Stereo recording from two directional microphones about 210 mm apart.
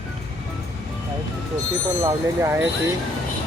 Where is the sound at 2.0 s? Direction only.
15° right (ahead or behind).